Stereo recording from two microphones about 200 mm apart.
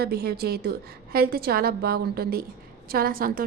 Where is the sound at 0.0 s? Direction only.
50° right (ahead or behind).